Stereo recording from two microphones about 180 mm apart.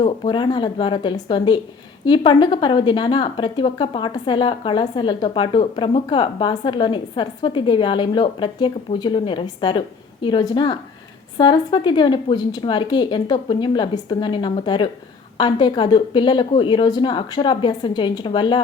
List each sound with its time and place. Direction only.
0.0 s a woman's voice: 25° left (ahead or behind)